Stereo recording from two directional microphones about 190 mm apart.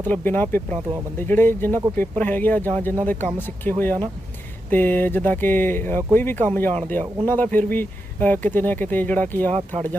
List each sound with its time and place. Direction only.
0.0 s speech: 10° left (ahead or behind)
9.5 s speech: 35° right (ahead or behind)